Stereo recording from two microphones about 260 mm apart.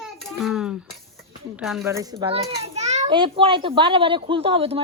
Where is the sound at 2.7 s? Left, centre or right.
Right.